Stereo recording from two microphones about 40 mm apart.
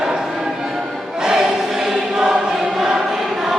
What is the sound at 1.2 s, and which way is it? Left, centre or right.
Choir, centre.